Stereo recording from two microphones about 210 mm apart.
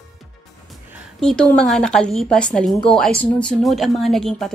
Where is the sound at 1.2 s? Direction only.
5° left (ahead or behind).